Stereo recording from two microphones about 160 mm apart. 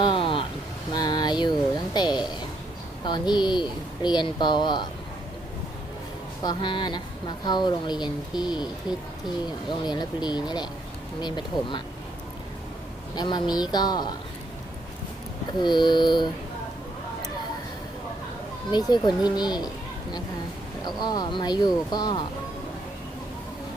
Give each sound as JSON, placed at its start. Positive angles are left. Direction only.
{"t": 0.0, "sound": "vehicle", "side_deg": 30}
{"t": 0.9, "sound": "a sound", "side_deg": 25}
{"t": 3.0, "sound": "speech", "side_deg": 25}
{"t": 6.4, "sound": "speech", "side_deg": 25}
{"t": 13.1, "sound": "speech", "side_deg": 30}
{"t": 15.6, "sound": "speech", "side_deg": 25}
{"t": 18.7, "sound": "speech", "side_deg": 25}